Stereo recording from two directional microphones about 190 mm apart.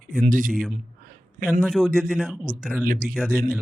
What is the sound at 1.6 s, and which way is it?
A man's voice, 5° left (ahead or behind).